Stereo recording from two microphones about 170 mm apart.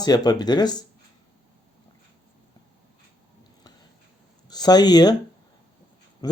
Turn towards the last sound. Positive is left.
turn(degrees=20)  # may be behind; listen again after turning